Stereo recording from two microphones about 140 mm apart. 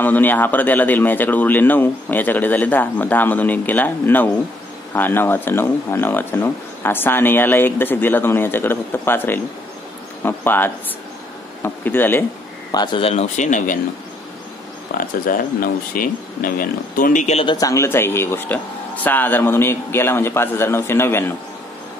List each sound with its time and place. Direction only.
0.0 s speech: 15° left (ahead or behind)
12.7 s speech: 35° left (ahead or behind); by 13.7 s 65° left (ahead or behind)
15.0 s speech: 85° left; by 17.4 s 65° left (ahead or behind)
17.6 s speech: 20° left (ahead or behind)